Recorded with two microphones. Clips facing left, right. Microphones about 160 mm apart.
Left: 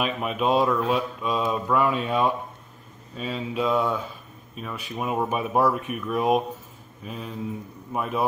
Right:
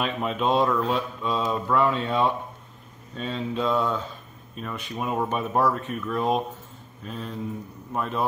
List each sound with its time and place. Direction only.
0.0 s mantra: 5° left (ahead or behind)